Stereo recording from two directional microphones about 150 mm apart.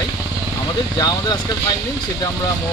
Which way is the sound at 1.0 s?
30° left (ahead or behind).